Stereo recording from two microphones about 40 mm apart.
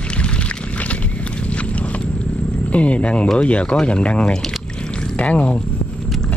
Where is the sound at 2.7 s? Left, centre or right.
Left.